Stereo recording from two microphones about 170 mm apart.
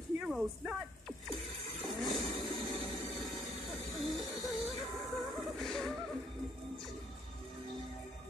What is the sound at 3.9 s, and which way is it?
Music, centre (ahead or behind).